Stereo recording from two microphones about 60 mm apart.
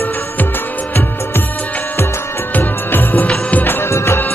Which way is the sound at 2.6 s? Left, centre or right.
Left.